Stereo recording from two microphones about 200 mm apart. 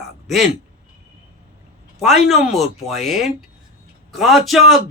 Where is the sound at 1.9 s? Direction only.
Centre (ahead or behind).